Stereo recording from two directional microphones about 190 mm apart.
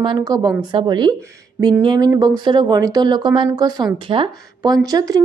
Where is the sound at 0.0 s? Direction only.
20° right (ahead or behind).